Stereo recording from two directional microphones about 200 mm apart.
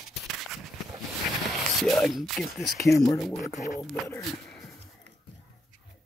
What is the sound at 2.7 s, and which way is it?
Speech, 15° left (ahead or behind).